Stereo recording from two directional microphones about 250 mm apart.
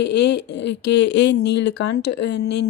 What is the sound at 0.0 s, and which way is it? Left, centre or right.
Speech, left.